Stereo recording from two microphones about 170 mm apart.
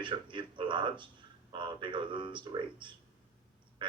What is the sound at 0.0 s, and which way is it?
Speech, 30° right (ahead or behind).